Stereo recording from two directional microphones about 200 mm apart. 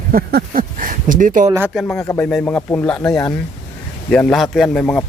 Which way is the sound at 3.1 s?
15° left (ahead or behind).